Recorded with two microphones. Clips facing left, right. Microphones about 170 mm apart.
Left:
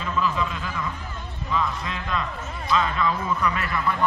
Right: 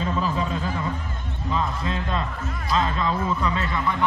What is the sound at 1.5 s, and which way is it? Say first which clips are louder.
Speech: right 1 dB; 35° right (ahead or behind).